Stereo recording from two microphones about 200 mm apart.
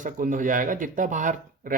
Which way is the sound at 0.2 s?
40° right (ahead or behind).